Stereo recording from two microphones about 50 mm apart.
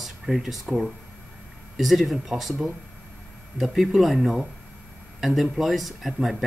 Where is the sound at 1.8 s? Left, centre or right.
Centre.